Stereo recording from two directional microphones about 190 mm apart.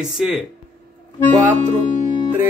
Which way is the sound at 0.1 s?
5° right (ahead or behind).